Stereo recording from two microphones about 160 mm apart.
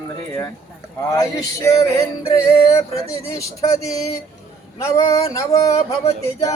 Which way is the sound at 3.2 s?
20° left (ahead or behind).